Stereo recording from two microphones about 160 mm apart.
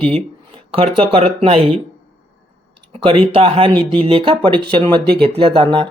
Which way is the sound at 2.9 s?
35° right (ahead or behind).